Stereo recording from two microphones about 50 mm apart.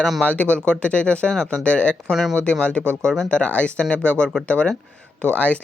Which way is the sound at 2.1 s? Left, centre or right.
Centre.